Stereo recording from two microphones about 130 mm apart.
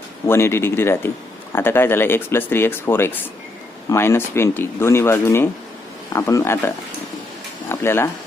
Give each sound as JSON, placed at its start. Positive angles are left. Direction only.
{"t": 0.3, "sound": "speech", "side_deg": 20}